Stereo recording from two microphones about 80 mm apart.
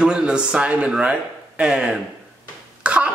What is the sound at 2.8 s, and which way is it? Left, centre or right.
Cough, centre.